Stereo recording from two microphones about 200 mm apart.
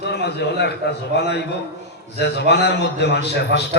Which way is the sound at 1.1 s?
55° left (ahead or behind).